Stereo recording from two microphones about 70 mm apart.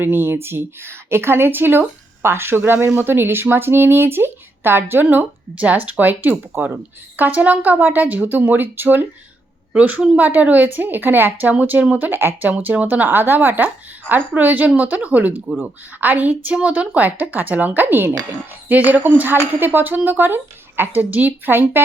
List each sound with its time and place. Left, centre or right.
0.0 s speech: right